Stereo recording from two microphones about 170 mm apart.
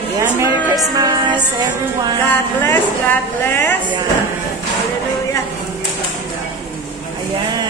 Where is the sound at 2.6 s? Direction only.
10° left (ahead or behind).